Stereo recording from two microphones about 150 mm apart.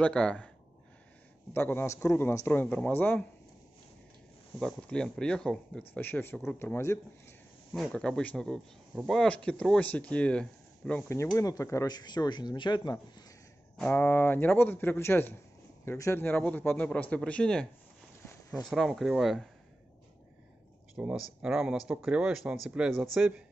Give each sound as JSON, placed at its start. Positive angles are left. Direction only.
{"t": 0.0, "sound": "speech", "side_deg": 5}
{"t": 1.5, "sound": "speech", "side_deg": 15}
{"t": 4.6, "sound": "speech", "side_deg": 5}
{"t": 7.7, "sound": "speech", "side_deg": 5}
{"t": 13.7, "sound": "speech", "side_deg": 10}
{"t": 20.9, "sound": "speech", "side_deg": -5}